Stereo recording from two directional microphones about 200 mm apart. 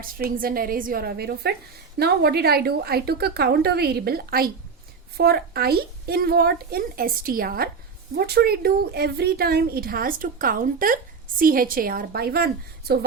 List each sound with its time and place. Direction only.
0.0 s speech: 45° right (ahead or behind)